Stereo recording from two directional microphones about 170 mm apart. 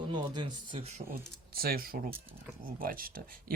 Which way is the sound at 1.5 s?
60° right (ahead or behind).